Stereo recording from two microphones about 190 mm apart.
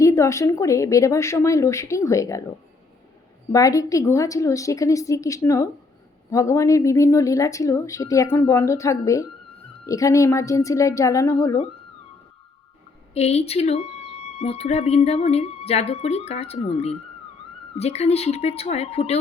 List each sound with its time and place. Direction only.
0.0 s speech: 15° left (ahead or behind)
3.5 s speech: 15° left (ahead or behind)
13.1 s speech: 35° left (ahead or behind)